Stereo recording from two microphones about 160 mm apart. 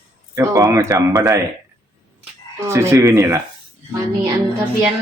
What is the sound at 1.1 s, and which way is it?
Speech, 5° right (ahead or behind).